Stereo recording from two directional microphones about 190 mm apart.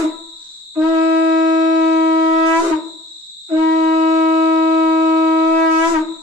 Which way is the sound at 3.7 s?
40° right (ahead or behind).